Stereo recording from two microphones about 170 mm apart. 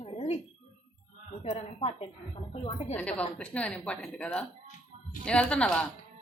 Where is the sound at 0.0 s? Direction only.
35° left (ahead or behind).